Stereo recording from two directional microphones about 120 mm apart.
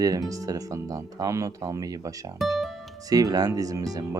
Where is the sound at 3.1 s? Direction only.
30° right (ahead or behind).